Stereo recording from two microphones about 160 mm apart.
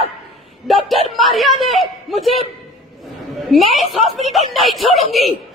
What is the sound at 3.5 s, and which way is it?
A woman's voice, centre (ahead or behind).